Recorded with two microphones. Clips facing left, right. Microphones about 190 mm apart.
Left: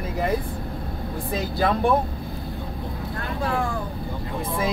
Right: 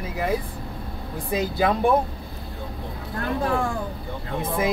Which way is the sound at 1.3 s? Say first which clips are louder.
Right 2 dB; 15° right (ahead or behind).